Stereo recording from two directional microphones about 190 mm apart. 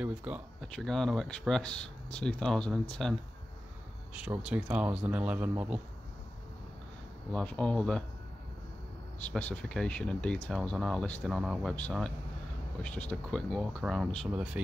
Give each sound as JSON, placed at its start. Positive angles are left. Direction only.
{"t": 0.0, "sound": "speech", "side_deg": -5}
{"t": 4.4, "sound": "speech", "side_deg": -5}
{"t": 7.3, "sound": "speech", "side_deg": 5}
{"t": 9.3, "sound": "speech", "side_deg": 5}